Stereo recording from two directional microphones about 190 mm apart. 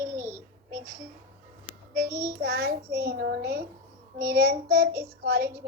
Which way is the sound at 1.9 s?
50° right (ahead or behind).